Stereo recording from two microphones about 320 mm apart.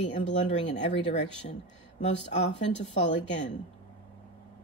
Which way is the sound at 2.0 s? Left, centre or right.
Left.